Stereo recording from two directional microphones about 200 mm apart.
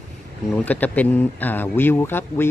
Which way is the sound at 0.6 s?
10° left (ahead or behind).